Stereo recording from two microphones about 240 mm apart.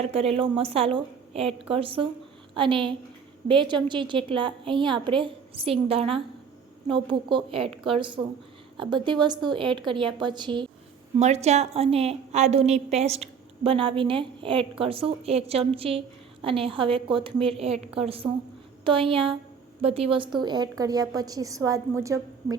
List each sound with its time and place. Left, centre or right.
0.0 s a woman's voice: right